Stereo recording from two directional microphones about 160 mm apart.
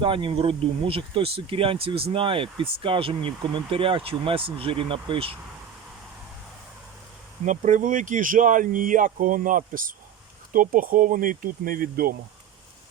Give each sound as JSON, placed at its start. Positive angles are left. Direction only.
{"t": 0.0, "sound": "speech", "side_deg": -35}
{"t": 7.4, "sound": "speech", "side_deg": -50}